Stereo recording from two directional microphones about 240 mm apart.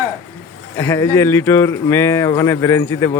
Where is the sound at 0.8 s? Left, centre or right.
Centre.